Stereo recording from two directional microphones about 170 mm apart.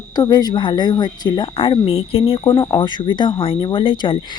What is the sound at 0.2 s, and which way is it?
Speech, 25° left (ahead or behind).